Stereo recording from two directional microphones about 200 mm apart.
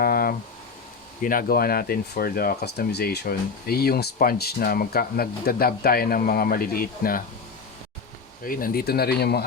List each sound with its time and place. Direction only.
0.0 s a sound: 50° left (ahead or behind)
1.2 s speech: 45° left (ahead or behind)
8.4 s speech: 45° left (ahead or behind)